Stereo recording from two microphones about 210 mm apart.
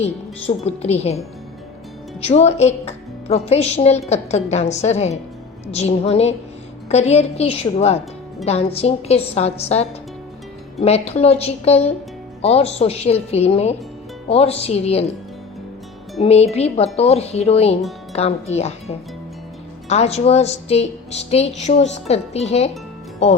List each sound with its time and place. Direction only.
0.0 s a woman's voice: 30° left (ahead or behind)
2.2 s a woman's voice: 30° left (ahead or behind)
16.2 s a woman's voice: 30° left (ahead or behind)